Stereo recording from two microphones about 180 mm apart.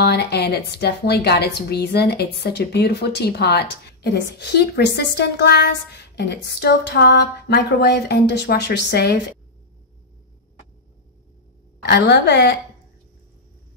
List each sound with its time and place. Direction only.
0.0 s speech: 65° left (ahead or behind)
11.8 s a woman's voice: 70° left (ahead or behind)